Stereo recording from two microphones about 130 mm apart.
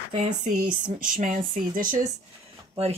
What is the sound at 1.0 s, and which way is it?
Speech, 90° right.